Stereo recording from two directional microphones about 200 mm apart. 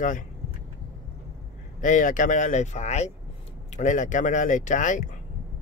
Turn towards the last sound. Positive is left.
turn(degrees=40)  # may be behind; listen again after turning